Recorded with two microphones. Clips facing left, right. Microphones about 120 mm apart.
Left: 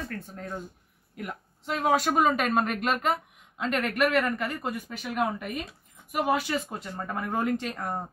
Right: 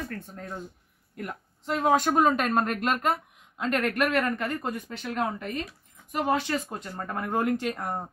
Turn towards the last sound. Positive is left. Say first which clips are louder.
# right 1 dB
turn(degrees=0)  # may be behind; listen again after turning